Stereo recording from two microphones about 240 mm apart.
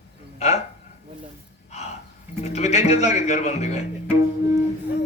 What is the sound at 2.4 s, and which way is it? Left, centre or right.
A man's voice, left.